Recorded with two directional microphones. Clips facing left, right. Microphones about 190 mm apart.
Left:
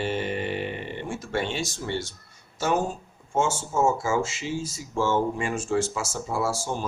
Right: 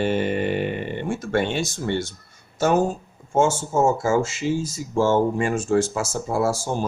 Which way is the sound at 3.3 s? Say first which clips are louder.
Right 6 dB; 40° right (ahead or behind).